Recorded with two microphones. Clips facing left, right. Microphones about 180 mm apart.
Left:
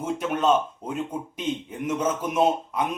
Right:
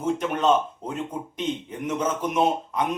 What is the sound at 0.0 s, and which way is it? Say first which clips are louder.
A man's voice: right 1 dB; 10° left (ahead or behind).